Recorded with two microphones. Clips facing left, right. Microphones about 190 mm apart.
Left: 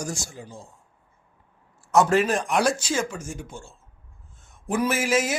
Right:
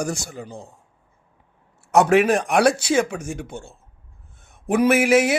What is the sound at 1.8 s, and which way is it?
Speech, 65° right (ahead or behind).